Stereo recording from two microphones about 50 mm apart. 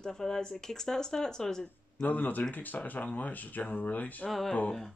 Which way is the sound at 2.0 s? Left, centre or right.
Left.